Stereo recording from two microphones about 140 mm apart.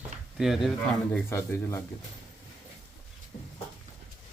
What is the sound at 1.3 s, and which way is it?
Speech, 20° left (ahead or behind).